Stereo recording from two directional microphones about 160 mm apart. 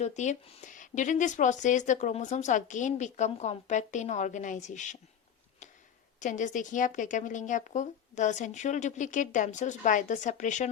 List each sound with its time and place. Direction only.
0.0 s speech: 45° left (ahead or behind)
6.1 s speech: 50° left (ahead or behind)